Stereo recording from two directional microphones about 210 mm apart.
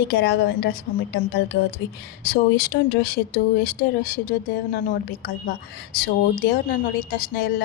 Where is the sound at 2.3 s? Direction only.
45° left (ahead or behind).